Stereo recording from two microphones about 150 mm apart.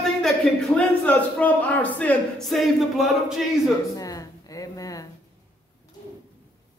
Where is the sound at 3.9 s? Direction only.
25° left (ahead or behind).